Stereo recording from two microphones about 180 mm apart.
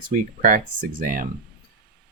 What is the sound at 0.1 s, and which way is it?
Speech, 45° right (ahead or behind).